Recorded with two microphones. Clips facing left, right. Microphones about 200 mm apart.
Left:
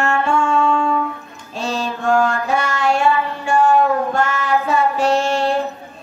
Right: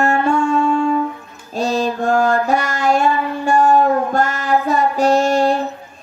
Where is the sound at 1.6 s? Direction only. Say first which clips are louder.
Right 5 dB; 40° right (ahead or behind).